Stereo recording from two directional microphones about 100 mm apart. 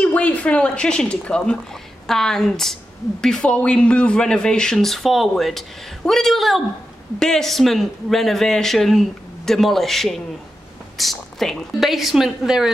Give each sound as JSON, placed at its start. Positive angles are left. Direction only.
{"t": 0.0, "sound": "speech", "side_deg": 15}